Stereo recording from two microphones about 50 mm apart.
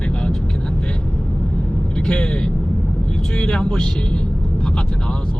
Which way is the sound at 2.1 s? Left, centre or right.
Centre.